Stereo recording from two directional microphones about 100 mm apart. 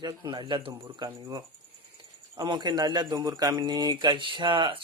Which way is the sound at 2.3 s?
45° right (ahead or behind).